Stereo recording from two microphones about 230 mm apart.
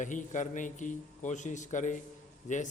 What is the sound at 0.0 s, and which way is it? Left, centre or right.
A man's voice, left.